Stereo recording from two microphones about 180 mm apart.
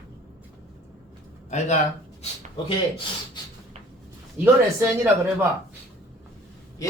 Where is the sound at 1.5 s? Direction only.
40° left (ahead or behind).